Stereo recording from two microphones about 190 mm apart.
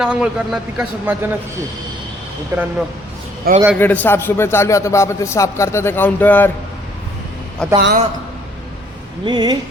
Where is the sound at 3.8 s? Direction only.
10° left (ahead or behind).